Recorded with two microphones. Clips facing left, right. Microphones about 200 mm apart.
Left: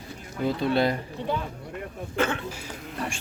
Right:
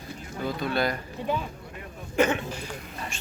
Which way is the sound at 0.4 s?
25° left (ahead or behind).